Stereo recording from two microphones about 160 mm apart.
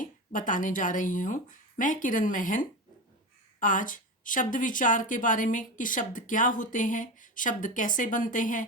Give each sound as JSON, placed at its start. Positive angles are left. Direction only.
{"t": 0.0, "sound": "a woman's voice", "side_deg": 55}